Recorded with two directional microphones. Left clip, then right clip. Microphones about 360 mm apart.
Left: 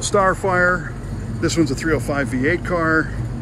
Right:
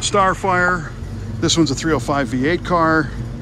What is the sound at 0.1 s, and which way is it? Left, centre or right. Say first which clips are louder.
Speech: even; centre.